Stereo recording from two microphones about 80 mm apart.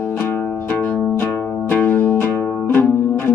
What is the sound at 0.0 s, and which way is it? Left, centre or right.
Music, left.